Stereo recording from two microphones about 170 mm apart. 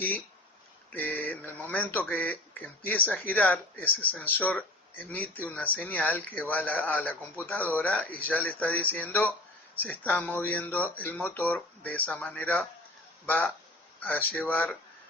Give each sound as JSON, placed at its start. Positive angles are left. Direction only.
{"t": 0.9, "sound": "speech", "side_deg": 10}
{"t": 14.0, "sound": "speech", "side_deg": 10}